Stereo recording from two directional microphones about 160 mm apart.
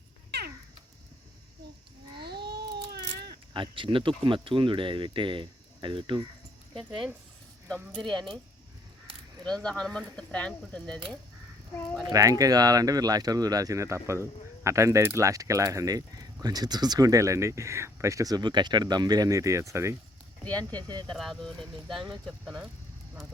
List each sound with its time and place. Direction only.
0.3 s cat: 85° right
2.1 s a sound: 90° right
3.5 s speech: 30° right (ahead or behind)
6.7 s speech: centre (ahead or behind)
9.6 s speech: 5° left (ahead or behind)
12.0 s speech: 20° right (ahead or behind)
20.4 s speech: 10° left (ahead or behind)
20.7 s speech: 25° right (ahead or behind)
21.1 s speech: centre (ahead or behind)